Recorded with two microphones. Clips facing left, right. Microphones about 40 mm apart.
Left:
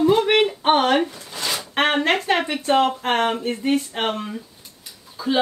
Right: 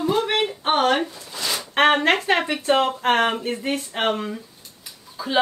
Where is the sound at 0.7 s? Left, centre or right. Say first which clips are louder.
Even; centre.